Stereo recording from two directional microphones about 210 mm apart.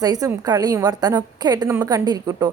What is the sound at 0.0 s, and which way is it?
A woman's voice, 15° right (ahead or behind).